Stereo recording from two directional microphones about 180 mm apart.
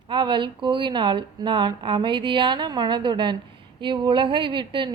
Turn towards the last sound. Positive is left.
turn(degrees=-25)  # may be behind; listen again after turning